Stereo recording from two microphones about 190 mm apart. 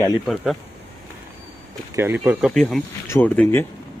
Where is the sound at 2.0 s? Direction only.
10° right (ahead or behind).